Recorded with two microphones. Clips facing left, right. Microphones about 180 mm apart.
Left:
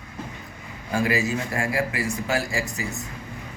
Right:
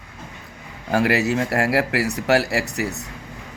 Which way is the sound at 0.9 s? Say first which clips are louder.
Right 5 dB; 70° right (ahead or behind).